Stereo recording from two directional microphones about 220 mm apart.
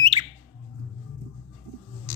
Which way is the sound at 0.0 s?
25° right (ahead or behind).